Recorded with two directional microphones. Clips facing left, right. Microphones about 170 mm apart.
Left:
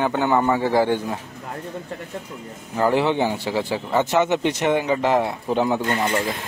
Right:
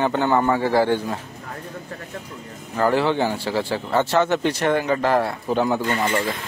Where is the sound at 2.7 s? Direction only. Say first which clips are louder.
Even; 20° left (ahead or behind).